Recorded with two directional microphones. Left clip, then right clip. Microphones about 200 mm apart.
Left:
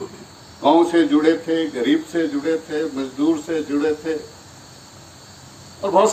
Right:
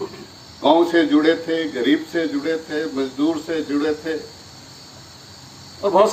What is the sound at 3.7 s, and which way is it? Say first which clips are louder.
Speech: left 1 dB; 15° left (ahead or behind).